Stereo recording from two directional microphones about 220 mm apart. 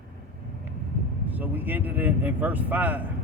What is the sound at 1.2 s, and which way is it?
Speech, 10° right (ahead or behind).